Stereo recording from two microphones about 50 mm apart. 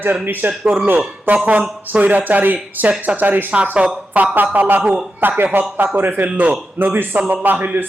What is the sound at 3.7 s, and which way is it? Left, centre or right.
Speech, centre.